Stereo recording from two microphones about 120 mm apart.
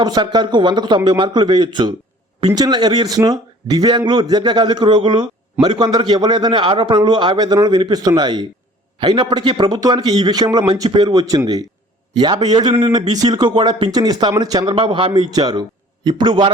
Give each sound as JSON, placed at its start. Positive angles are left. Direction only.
{"t": 0.0, "sound": "a man's voice", "side_deg": -35}